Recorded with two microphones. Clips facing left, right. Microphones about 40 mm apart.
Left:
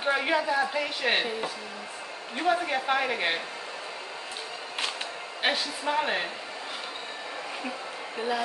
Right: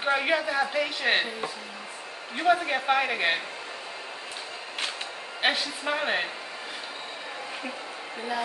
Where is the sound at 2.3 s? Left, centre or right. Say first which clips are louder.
Right 2 dB; centre.